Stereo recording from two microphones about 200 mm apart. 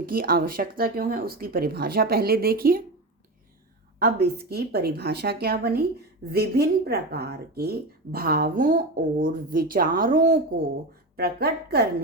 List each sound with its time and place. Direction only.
0.0 s speech: 45° right (ahead or behind)
4.0 s speech: 50° right (ahead or behind)